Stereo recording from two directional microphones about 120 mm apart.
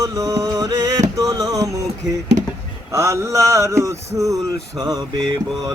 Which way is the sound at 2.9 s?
25° right (ahead or behind).